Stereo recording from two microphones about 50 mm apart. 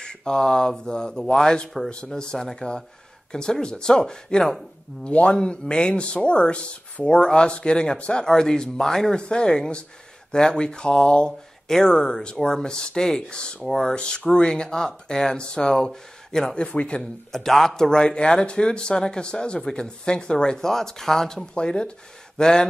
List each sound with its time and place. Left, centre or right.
0.0 s speech: centre
5.0 s speech: left
17.3 s speech: centre
21.5 s speech: centre